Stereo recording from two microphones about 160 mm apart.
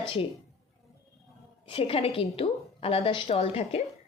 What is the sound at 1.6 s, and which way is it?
A woman's voice, 35° left (ahead or behind).